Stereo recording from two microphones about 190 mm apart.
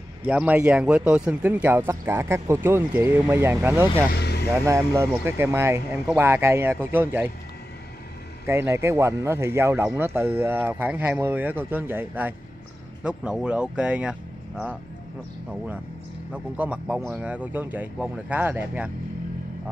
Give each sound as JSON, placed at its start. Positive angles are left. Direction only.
{"t": 0.2, "sound": "speech", "side_deg": -10}
{"t": 4.1, "sound": "speech", "side_deg": 60}
{"t": 4.6, "sound": "speech", "side_deg": -15}
{"t": 8.5, "sound": "speech", "side_deg": -15}
{"t": 16.5, "sound": "speech", "side_deg": -5}